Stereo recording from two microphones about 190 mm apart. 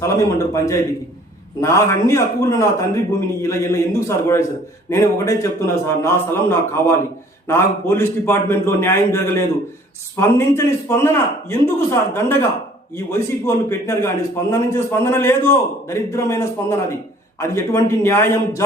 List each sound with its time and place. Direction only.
0.0 s a man's voice: 15° left (ahead or behind)